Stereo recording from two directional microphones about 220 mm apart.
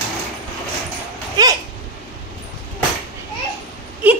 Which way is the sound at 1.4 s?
15° right (ahead or behind).